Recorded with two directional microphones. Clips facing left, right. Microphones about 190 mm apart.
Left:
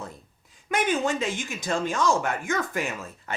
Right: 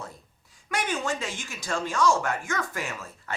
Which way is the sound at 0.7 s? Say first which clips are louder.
Left 4 dB; 20° left (ahead or behind).